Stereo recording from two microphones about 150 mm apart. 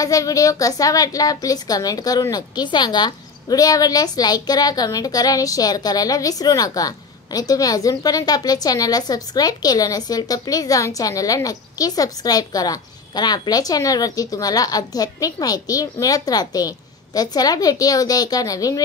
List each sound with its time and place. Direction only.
0.0 s a woman's voice: 20° left (ahead or behind)